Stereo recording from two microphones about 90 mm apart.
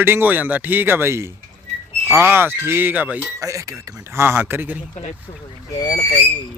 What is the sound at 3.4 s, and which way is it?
Speech, 40° right (ahead or behind).